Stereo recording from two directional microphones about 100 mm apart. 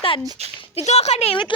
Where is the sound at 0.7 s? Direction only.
90° left.